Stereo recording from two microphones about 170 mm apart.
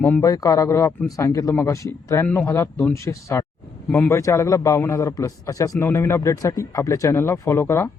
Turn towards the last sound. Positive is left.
turn(degrees=15)  # may be behind; listen again after turning